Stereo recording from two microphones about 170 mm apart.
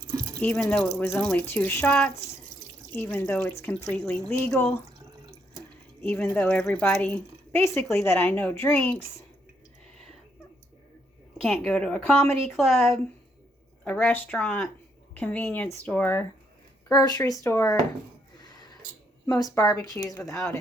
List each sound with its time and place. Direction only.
0.3 s a woman's voice: 5° left (ahead or behind)
6.0 s a woman's voice: 10° left (ahead or behind)
11.4 s a woman's voice: 5° left (ahead or behind)
16.9 s speech: 20° left (ahead or behind)
18.4 s a sound: 25° left (ahead or behind)
19.3 s speech: 20° left (ahead or behind)